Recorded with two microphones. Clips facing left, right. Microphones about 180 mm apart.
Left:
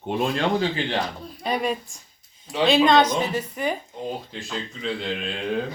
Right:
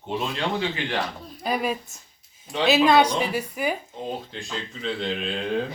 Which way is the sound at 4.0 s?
Centre (ahead or behind).